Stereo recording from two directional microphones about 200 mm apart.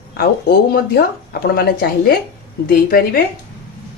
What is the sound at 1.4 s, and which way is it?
Speech, 50° left (ahead or behind).